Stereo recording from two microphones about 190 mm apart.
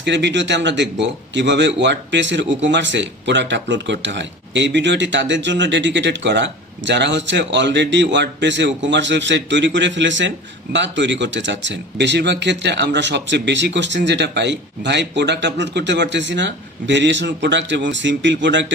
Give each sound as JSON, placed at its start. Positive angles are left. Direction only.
{"t": 0.0, "sound": "speech", "side_deg": -65}